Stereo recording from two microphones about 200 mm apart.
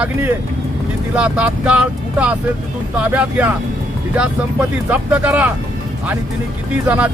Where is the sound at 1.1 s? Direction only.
5° right (ahead or behind).